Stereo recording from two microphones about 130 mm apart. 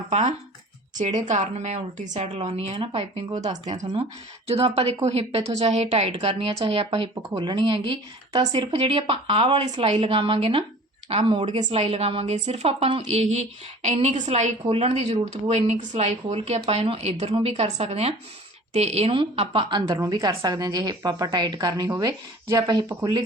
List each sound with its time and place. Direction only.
0.1 s a woman's voice: 60° right (ahead or behind); by 3.2 s 45° right (ahead or behind)
4.4 s a woman's voice: 50° right (ahead or behind); by 8.7 s 35° right (ahead or behind)
8.7 s speech: 50° right (ahead or behind)
13.0 s a woman's voice: 60° right (ahead or behind)
14.6 s speech: 50° right (ahead or behind)
20.0 s a woman's voice: 30° right (ahead or behind)